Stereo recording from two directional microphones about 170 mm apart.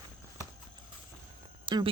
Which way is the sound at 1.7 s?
30° right (ahead or behind).